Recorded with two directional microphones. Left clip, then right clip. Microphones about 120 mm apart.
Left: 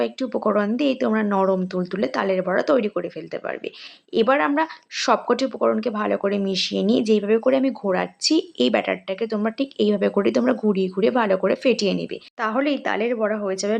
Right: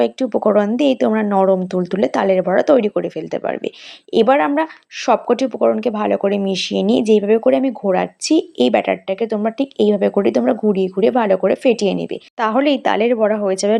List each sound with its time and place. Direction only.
0.0 s speech: 35° right (ahead or behind)
12.4 s a woman's voice: 50° right (ahead or behind)